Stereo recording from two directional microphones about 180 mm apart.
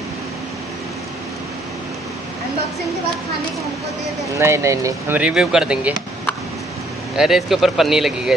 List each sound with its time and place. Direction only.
4.4 s speech: 15° right (ahead or behind)
7.2 s speech: centre (ahead or behind)